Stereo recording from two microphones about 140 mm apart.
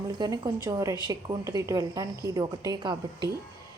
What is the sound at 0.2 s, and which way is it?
A woman's voice, 25° right (ahead or behind).